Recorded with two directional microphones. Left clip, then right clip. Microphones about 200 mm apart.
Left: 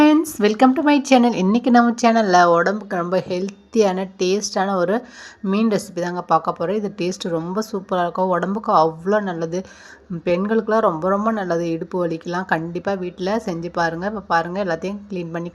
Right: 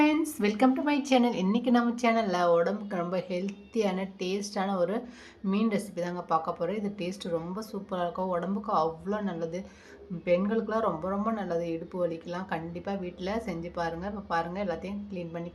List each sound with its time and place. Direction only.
0.0 s speech: 25° left (ahead or behind)